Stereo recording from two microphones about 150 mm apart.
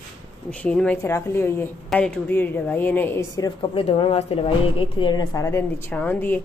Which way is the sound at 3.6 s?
35° left (ahead or behind).